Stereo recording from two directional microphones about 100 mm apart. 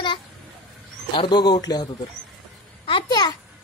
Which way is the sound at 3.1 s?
40° left (ahead or behind).